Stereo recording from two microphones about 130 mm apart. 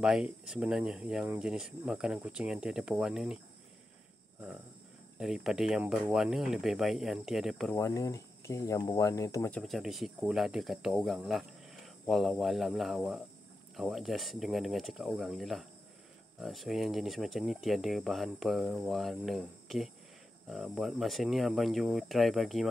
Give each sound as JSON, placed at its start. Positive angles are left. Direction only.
{"t": 0.0, "sound": "speech", "side_deg": -5}
{"t": 5.2, "sound": "speech", "side_deg": 0}
{"t": 7.7, "sound": "speech", "side_deg": 25}
{"t": 9.5, "sound": "speech", "side_deg": 0}